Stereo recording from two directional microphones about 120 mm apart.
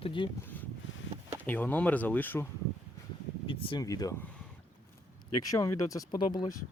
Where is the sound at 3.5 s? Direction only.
45° left (ahead or behind).